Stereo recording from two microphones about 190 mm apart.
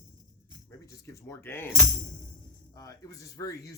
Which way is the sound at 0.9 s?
15° left (ahead or behind).